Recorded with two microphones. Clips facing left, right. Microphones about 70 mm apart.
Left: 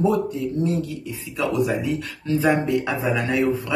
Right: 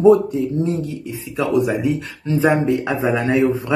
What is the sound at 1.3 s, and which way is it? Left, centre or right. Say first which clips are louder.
Speech: right 4 dB; right.